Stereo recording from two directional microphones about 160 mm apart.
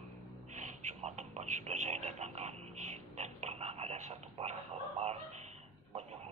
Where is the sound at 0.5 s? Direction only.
50° right (ahead or behind).